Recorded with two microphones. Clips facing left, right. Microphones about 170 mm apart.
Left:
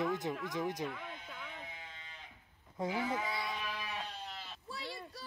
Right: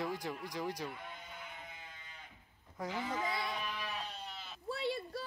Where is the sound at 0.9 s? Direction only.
90° left.